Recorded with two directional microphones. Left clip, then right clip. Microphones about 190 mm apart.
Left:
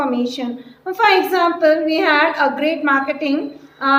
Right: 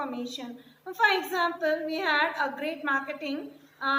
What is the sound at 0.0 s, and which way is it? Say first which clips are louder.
A woman's voice: left 14 dB; 50° left (ahead or behind).